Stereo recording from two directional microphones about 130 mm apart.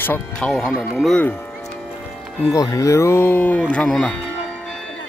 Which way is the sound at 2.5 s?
25° left (ahead or behind).